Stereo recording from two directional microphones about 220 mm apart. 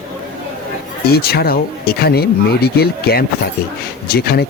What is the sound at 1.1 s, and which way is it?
Speech, 45° left (ahead or behind).